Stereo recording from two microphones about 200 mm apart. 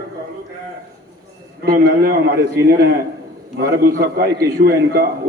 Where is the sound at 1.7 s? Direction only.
50° right (ahead or behind).